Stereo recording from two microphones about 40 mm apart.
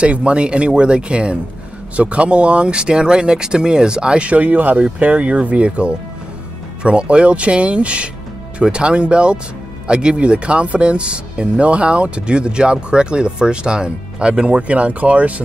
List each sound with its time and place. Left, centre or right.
0.0 s speech: right